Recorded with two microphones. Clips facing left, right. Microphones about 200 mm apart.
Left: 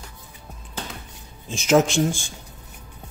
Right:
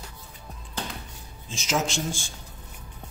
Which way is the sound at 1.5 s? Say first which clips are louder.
Left 10 dB; 60° left (ahead or behind).